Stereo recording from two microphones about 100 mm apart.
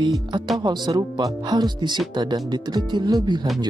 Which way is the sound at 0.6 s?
45° right (ahead or behind).